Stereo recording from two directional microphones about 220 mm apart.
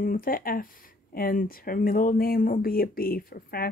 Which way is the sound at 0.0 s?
40° left (ahead or behind).